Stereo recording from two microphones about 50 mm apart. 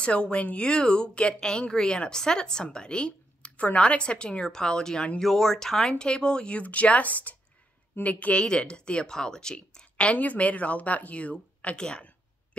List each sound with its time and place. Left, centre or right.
0.0 s speech: left
5.2 s speech: centre
10.1 s speech: left